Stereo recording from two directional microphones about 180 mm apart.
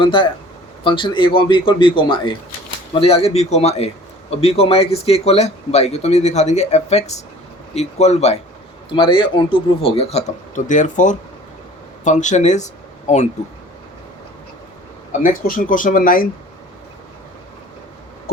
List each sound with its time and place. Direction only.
0.0 s a man's voice: 30° left (ahead or behind)
8.9 s a man's voice: 25° left (ahead or behind)
15.4 s speech: 50° left (ahead or behind)